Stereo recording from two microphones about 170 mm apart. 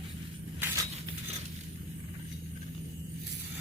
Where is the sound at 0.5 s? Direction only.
10° right (ahead or behind).